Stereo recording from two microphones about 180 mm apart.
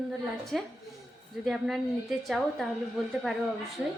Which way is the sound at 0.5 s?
Centre (ahead or behind).